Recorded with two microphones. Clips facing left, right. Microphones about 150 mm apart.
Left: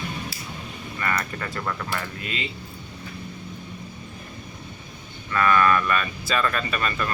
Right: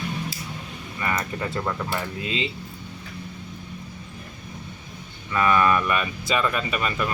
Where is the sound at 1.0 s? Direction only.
20° right (ahead or behind).